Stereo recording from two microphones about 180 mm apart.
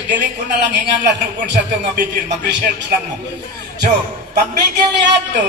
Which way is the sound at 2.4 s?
70° right (ahead or behind).